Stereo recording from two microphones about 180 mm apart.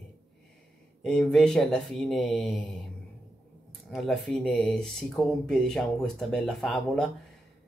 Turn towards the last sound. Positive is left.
turn(degrees=0)  # may be behind; listen again after turning